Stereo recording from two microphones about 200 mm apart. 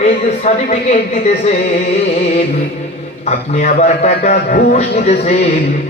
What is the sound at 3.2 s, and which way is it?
A man's voice, 35° left (ahead or behind).